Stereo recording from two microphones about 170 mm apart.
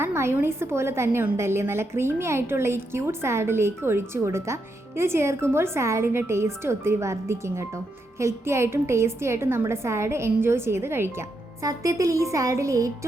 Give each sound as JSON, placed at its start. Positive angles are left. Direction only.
{"t": 0.0, "sound": "a woman's voice", "side_deg": -15}